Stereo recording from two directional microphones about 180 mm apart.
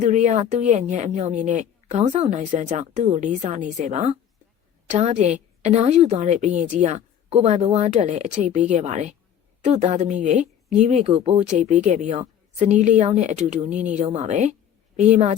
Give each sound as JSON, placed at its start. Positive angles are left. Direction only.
{"t": 0.0, "sound": "a woman's voice", "side_deg": -40}